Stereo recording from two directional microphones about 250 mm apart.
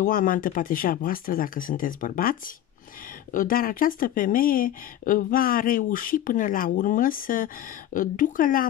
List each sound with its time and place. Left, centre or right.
0.0 s speech: left